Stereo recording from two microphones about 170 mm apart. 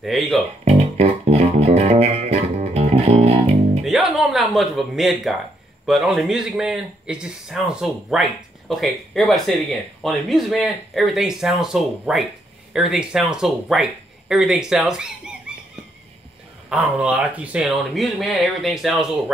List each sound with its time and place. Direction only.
0.0 s speech: centre (ahead or behind)
0.7 s music: 40° right (ahead or behind)
3.8 s music: centre (ahead or behind)
5.9 s speech: centre (ahead or behind)
16.6 s speech: 5° right (ahead or behind)